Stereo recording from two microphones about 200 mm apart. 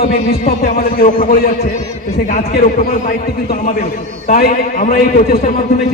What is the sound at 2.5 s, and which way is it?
A man's voice, 45° left (ahead or behind).